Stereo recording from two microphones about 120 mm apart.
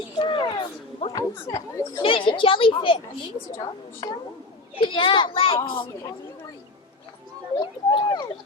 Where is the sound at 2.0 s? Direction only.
45° left (ahead or behind).